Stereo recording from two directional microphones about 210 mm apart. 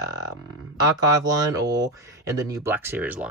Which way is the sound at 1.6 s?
15° right (ahead or behind).